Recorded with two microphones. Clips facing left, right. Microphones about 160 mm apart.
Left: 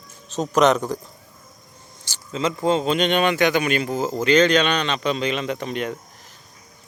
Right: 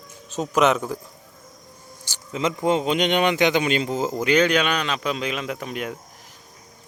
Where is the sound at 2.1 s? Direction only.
15° right (ahead or behind).